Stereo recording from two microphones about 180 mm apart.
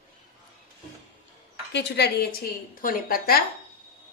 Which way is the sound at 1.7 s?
65° left (ahead or behind).